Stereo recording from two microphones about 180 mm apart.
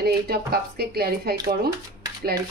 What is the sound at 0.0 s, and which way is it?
A woman's voice, 60° right (ahead or behind).